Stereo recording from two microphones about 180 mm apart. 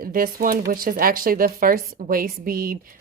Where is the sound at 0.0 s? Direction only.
55° right (ahead or behind).